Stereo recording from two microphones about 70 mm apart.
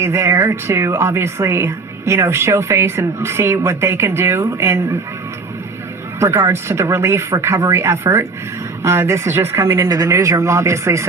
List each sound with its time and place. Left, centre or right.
0.0 s speech: right
6.1 s speech: right
9.9 s speech: right